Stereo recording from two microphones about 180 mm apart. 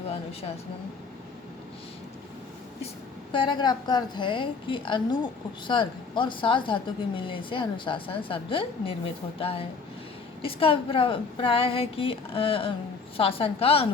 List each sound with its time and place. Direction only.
3.3 s a woman's voice: 25° left (ahead or behind)